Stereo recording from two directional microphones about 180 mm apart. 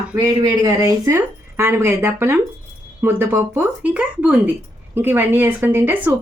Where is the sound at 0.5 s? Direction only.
15° right (ahead or behind).